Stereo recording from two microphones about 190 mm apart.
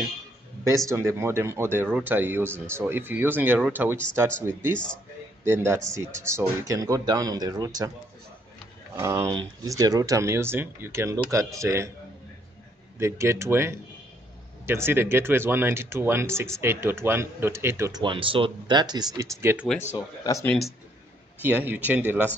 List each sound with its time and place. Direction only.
0.7 s speech: 15° right (ahead or behind)
4.7 s a man's voice: 5° left (ahead or behind)
5.4 s speech: 15° right (ahead or behind)
8.9 s speech: 15° right (ahead or behind)
13.0 s speech: 15° right (ahead or behind)
18.0 s speech: 25° right (ahead or behind)
20.4 s a man's voice: centre (ahead or behind)